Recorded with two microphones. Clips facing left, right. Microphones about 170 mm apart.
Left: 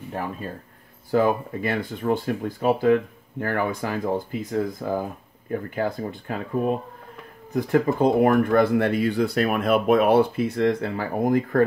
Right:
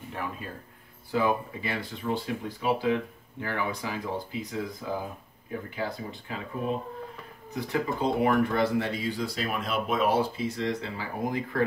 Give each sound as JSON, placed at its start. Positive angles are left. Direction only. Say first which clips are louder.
{"t": 1.1, "sound": "speech", "louder": "left 6 dB", "side_deg": 50}